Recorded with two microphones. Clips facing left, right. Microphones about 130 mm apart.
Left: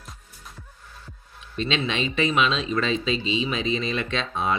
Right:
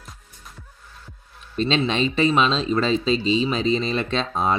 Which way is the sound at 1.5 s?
35° right (ahead or behind).